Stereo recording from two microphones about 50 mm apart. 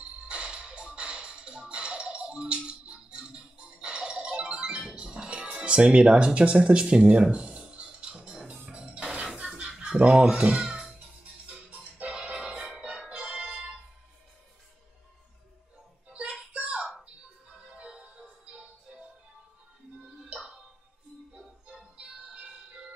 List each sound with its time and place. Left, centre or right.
0.0 s music: right
8.6 s dishes: right
10.0 s speech: centre
11.5 s music: right
16.1 s a sound: right
17.6 s music: right
21.6 s music: centre